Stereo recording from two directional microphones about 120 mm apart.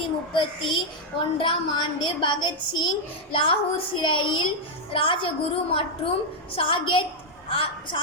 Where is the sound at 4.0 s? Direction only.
45° left (ahead or behind).